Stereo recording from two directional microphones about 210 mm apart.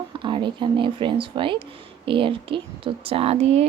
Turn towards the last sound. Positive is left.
turn(degrees=-30)  # may be behind; listen again after turning